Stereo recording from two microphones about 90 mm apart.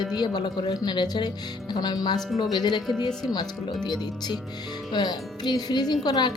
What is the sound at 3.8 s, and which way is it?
Speech, 55° left (ahead or behind).